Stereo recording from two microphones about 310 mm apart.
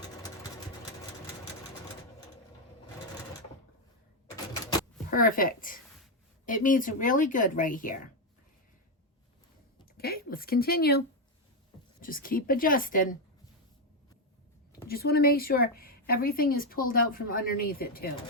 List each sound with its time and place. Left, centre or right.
0.0 s engine: centre
5.1 s a woman's voice: left
10.0 s a sound: left
12.0 s a woman's voice: left
14.8 s a woman's voice: left